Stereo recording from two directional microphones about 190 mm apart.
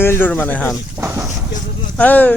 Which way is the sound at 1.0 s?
10° right (ahead or behind).